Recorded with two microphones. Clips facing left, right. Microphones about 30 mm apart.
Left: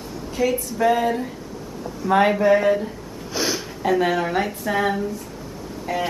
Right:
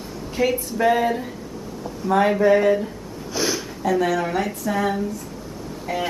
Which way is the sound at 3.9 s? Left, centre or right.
Centre.